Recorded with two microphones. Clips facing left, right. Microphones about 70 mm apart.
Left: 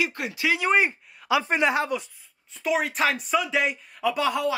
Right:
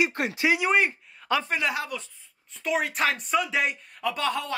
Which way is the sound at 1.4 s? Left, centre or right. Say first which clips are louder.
Left 5 dB; left.